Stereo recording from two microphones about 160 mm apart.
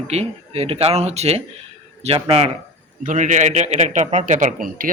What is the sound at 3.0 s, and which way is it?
Speech, 50° right (ahead or behind).